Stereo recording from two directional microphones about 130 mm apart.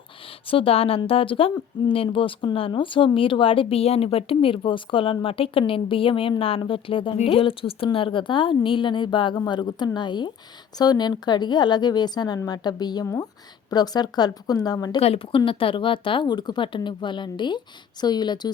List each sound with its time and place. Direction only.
0.4 s speech: 45° left (ahead or behind)
15.0 s speech: 45° left (ahead or behind)